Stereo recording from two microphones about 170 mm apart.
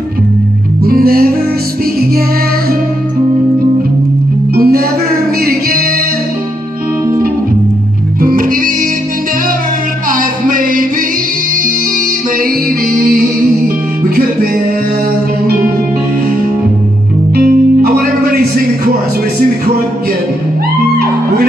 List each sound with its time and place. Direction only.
0.8 s music: 60° right (ahead or behind)
4.6 s music: 60° right (ahead or behind)
8.2 s music: 55° right (ahead or behind)
10.1 s music: 55° right (ahead or behind)
14.0 s music: 60° right (ahead or behind)
17.4 s music: 60° right (ahead or behind)